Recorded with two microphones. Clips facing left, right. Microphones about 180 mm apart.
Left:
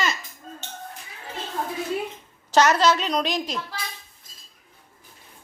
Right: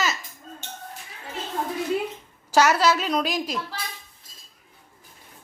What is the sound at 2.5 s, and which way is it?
A woman's voice, 5° right (ahead or behind).